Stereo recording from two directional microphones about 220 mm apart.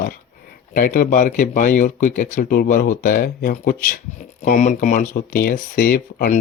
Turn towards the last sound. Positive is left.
turn(degrees=40)  # may be behind; listen again after turning